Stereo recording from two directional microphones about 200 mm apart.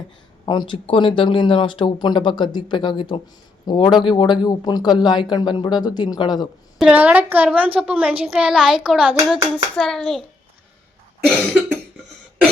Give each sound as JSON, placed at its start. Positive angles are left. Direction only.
{"t": 0.4, "sound": "speech", "side_deg": 25}
{"t": 6.7, "sound": "a woman's voice", "side_deg": -5}